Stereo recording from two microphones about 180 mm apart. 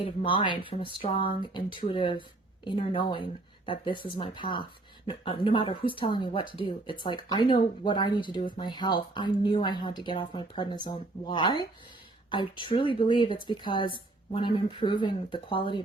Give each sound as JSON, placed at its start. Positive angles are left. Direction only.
{"t": 0.0, "sound": "speech", "side_deg": 30}